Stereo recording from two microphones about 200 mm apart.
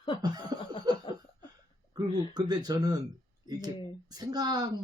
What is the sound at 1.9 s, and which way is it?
Speech, 20° right (ahead or behind).